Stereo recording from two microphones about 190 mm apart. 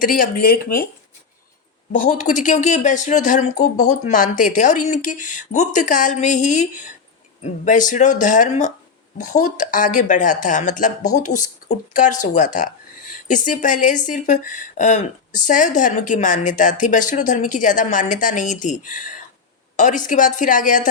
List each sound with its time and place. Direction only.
0.0 s a woman's voice: 45° left (ahead or behind)
1.9 s a woman's voice: 40° left (ahead or behind)